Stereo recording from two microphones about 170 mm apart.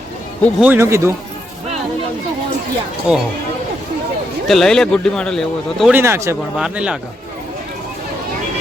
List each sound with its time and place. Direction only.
0.6 s speech: 15° right (ahead or behind)
3.1 s speech: 5° right (ahead or behind)
4.4 s speech: centre (ahead or behind)
5.9 s speech: 15° right (ahead or behind)
6.6 s speech: 5° right (ahead or behind)